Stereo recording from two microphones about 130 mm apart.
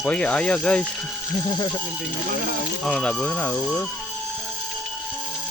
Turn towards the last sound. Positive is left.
turn(degrees=10)  # may be behind; listen again after turning